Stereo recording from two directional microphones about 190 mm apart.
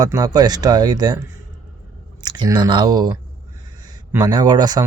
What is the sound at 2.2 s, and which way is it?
A man's voice, 20° right (ahead or behind).